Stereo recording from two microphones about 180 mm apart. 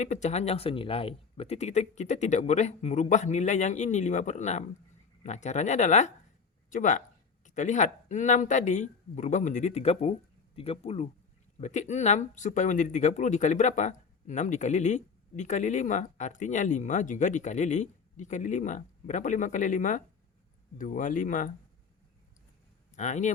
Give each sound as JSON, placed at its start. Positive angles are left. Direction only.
{"t": 0.0, "sound": "speech", "side_deg": 40}
{"t": 23.0, "sound": "speech", "side_deg": 40}